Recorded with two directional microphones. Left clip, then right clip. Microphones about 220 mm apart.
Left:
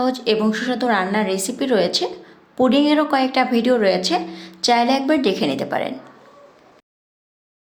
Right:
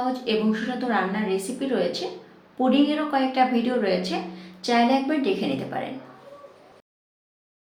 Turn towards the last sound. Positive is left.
turn(degrees=50)  # may be behind; listen again after turning